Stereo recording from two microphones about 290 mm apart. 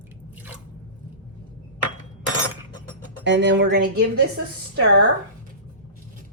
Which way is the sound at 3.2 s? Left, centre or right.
Right.